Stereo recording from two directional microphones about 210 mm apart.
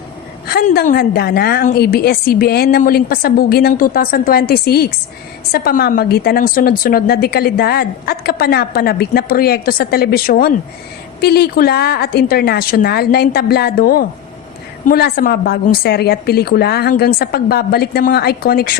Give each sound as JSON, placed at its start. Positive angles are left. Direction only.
{"t": 0.4, "sound": "a woman's voice", "side_deg": 45}